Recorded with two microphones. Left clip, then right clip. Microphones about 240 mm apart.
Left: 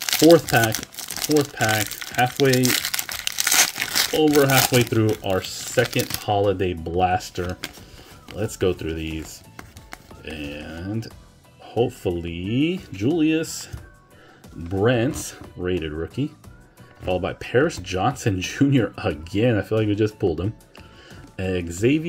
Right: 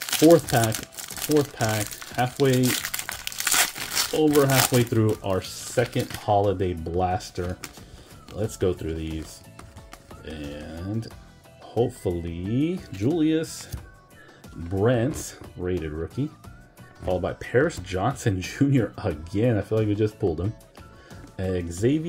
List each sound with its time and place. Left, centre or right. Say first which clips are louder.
0.2 s speech: left 3 dB; centre
14.7 s speech: left 3 dB; centre